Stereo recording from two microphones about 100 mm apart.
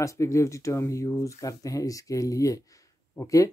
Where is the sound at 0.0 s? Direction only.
30° left (ahead or behind).